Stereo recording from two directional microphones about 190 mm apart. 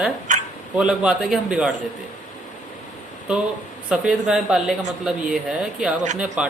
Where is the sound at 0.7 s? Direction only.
5° right (ahead or behind).